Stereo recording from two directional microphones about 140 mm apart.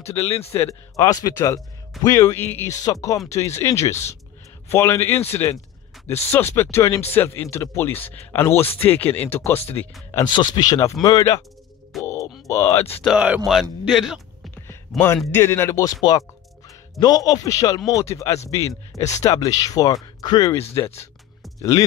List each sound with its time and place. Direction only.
0.0 s a man's voice: 20° left (ahead or behind)
10.3 s a man's voice: 30° left (ahead or behind)
12.0 s grunt: 20° left (ahead or behind)
12.4 s a man's voice: 20° left (ahead or behind)
13.0 s a man's voice: 5° right (ahead or behind)
15.3 s a man's voice: 20° left (ahead or behind)